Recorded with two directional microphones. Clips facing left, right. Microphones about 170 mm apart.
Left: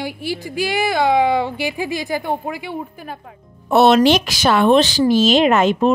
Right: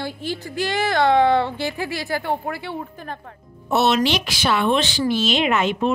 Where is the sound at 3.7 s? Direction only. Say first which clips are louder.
Left 7 dB; 50° left (ahead or behind).